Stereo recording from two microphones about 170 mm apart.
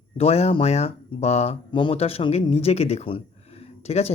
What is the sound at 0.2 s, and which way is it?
Speech, 40° left (ahead or behind).